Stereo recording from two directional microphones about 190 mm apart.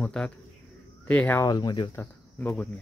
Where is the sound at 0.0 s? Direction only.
5° left (ahead or behind); by 2.0 s 20° left (ahead or behind).